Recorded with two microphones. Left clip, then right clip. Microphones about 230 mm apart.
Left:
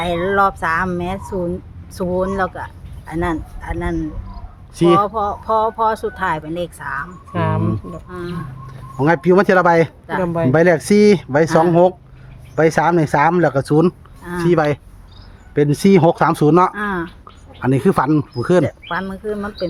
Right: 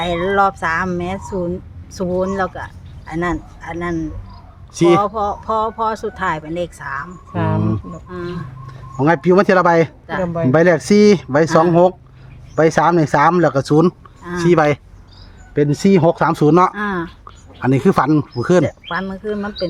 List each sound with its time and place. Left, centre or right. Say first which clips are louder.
0.0 s speech: even; centre
4.7 s speech: even; centre
5.0 s speech: even; centre
7.3 s a sound: even; left
8.6 s speech: right 1 dB; centre
10.2 s speech: left 1 dB; left
10.5 s speech: right 1 dB; centre
15.5 s speech: left 1 dB; centre
17.6 s speech: right 1 dB; centre
18.6 s speech: right 1 dB; centre